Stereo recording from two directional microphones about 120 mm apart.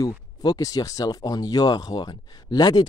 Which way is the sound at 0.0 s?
30° left (ahead or behind).